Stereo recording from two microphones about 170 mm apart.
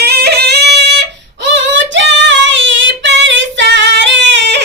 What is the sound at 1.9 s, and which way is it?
Female singing, 90° right.